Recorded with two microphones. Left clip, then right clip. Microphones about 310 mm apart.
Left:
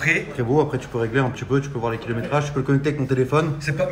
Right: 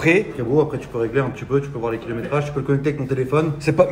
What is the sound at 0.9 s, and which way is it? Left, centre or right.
A man's voice, left.